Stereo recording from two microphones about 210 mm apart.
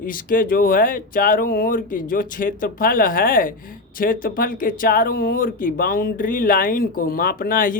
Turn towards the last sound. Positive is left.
turn(degrees=40)  # may be behind; listen again after turning